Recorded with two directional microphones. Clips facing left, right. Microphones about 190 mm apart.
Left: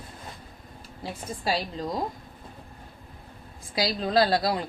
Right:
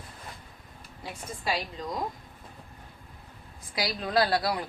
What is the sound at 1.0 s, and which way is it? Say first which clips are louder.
Speech: left 4 dB; 35° left (ahead or behind).